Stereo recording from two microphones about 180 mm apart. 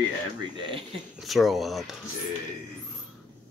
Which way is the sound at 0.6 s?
25° right (ahead or behind).